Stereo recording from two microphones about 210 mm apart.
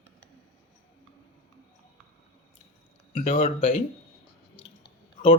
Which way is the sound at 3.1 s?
30° left (ahead or behind).